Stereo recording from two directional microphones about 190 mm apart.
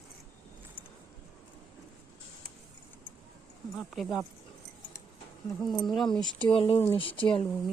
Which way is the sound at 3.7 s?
Centre (ahead or behind).